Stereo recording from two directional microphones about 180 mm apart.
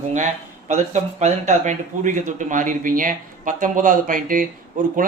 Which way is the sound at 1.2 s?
45° right (ahead or behind).